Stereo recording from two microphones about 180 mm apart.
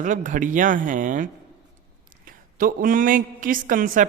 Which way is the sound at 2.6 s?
50° right (ahead or behind).